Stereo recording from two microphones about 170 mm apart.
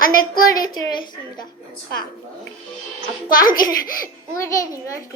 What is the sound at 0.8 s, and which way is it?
Speech, 25° left (ahead or behind).